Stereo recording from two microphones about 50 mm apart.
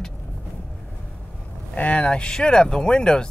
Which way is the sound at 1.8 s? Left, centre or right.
Left.